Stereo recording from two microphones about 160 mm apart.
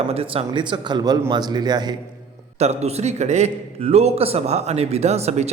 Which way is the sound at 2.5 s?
45° right (ahead or behind).